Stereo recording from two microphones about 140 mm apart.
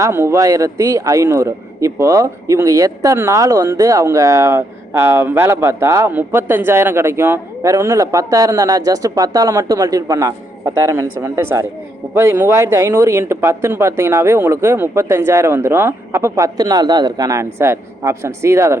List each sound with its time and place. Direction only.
0.0 s a man's voice: 20° right (ahead or behind)